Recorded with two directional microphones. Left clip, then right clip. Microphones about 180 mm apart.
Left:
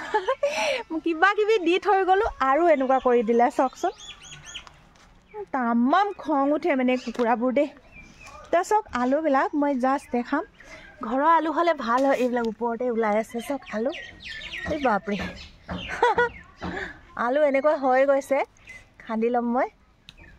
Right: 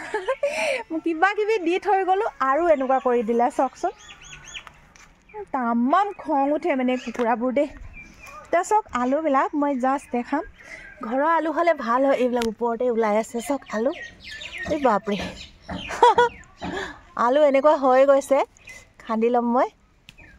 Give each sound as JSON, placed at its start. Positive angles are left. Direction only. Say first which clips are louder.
{"t": 0.0, "sound": "a woman's voice", "louder": "left 1 dB", "side_deg": 0}
{"t": 5.5, "sound": "a woman's voice", "louder": "right 1 dB", "side_deg": 5}